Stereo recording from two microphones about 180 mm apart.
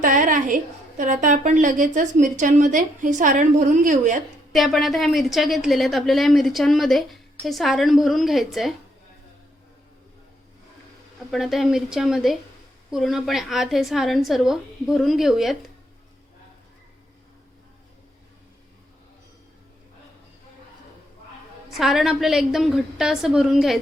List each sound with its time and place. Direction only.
0.0 s a woman's voice: 45° right (ahead or behind)
4.5 s a woman's voice: centre (ahead or behind)
11.3 s a woman's voice: centre (ahead or behind)
21.8 s a woman's voice: centre (ahead or behind)